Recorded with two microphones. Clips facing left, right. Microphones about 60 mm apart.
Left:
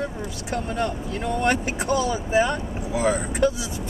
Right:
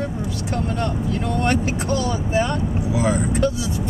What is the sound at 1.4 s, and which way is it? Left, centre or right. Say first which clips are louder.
Speech: even; centre.